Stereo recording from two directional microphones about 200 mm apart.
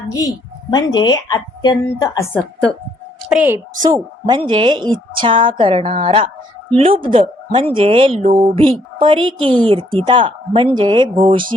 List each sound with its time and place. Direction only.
0.1 s speech: 20° left (ahead or behind)
3.2 s a woman's voice: 5° right (ahead or behind)
3.8 s speech: 20° right (ahead or behind)